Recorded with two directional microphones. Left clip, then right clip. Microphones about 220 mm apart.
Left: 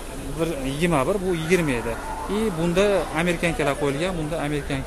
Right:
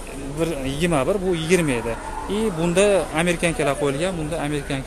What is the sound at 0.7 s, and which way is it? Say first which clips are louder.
A man's voice: right 1 dB; centre (ahead or behind).